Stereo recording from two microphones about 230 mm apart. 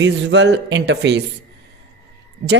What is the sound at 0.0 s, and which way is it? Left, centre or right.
A woman's voice, right.